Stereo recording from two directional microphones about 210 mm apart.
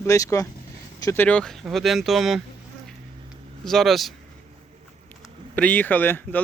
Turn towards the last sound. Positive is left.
turn(degrees=10)  # may be behind; listen again after turning